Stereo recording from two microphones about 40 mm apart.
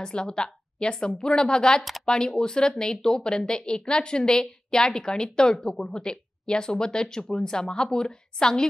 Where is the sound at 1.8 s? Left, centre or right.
Centre.